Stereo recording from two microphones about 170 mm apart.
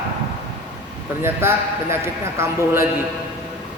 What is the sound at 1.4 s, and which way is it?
A man's voice, 15° right (ahead or behind).